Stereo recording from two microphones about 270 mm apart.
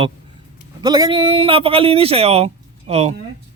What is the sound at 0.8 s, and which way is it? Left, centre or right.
Speech, centre.